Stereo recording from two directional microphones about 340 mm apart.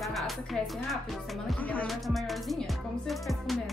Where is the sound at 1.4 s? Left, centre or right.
Centre.